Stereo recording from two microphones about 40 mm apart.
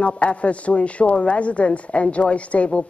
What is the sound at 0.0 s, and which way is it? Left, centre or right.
A woman's voice, left.